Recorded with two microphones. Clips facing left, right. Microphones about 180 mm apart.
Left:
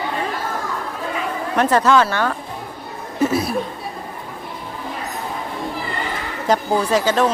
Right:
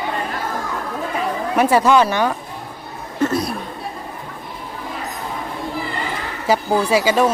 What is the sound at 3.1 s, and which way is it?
Chuckle, 10° left (ahead or behind).